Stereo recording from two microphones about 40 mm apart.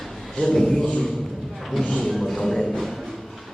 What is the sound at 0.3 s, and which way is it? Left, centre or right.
Speech, centre.